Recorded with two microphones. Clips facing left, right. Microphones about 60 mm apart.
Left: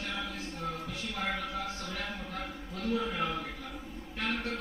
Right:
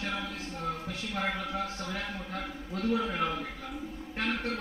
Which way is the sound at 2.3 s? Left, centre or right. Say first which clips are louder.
Right 3 dB; right.